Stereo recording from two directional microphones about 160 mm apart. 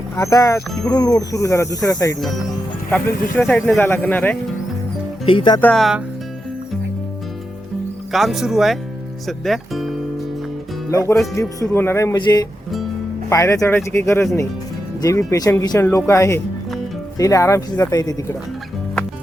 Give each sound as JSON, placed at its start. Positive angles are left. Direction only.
{"t": 0.2, "sound": "speech", "side_deg": 20}
{"t": 5.2, "sound": "speech", "side_deg": 35}
{"t": 5.5, "sound": "speech", "side_deg": 5}
{"t": 8.1, "sound": "speech", "side_deg": 0}
{"t": 10.9, "sound": "speech", "side_deg": 20}